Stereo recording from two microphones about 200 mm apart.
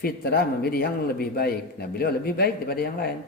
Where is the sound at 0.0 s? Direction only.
50° left (ahead or behind).